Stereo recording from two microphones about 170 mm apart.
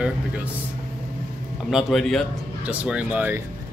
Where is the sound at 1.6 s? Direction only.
Centre (ahead or behind).